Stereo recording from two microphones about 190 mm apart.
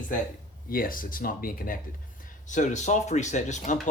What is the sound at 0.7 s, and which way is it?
Speech, 50° left (ahead or behind).